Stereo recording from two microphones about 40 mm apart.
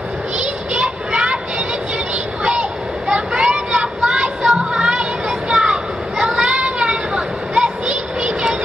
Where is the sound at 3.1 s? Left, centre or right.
Right.